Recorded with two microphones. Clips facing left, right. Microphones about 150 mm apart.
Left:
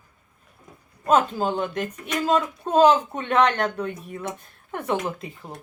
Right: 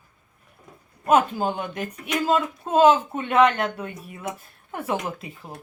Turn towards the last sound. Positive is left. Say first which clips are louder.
# left 1 dB
turn(degrees=-5)  # may be behind; listen again after turning